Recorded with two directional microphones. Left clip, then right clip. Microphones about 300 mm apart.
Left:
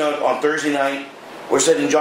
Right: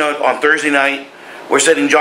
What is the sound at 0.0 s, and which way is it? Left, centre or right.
A man's voice, centre.